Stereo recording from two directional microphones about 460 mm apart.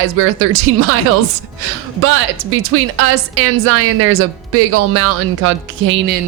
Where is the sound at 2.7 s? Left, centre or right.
Right.